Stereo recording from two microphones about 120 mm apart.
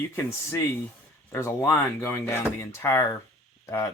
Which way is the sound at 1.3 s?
25° left (ahead or behind).